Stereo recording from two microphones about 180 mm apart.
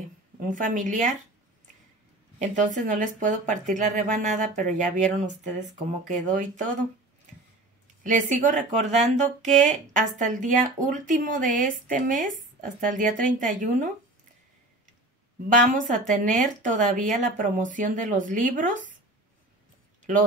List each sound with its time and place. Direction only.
0.4 s speech: 45° right (ahead or behind)
2.3 s speech: 45° right (ahead or behind)
8.0 s speech: 45° right (ahead or behind)
15.5 s speech: 45° right (ahead or behind)